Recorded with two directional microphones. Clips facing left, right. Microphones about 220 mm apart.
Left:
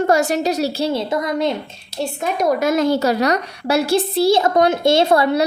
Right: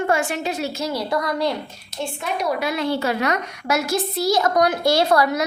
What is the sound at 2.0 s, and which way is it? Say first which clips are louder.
A woman's voice: left 5 dB; 45° left (ahead or behind).